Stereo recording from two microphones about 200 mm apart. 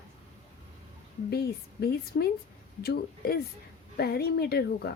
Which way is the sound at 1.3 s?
50° left (ahead or behind).